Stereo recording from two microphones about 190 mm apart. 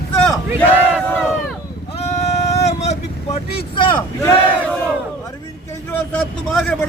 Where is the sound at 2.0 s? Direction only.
35° left (ahead or behind).